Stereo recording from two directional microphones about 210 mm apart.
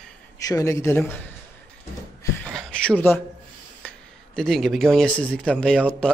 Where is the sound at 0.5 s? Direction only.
15° left (ahead or behind).